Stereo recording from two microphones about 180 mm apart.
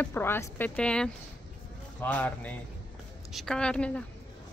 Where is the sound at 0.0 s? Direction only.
10° left (ahead or behind).